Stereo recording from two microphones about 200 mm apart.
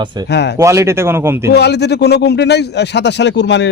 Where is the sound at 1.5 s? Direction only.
55° left (ahead or behind).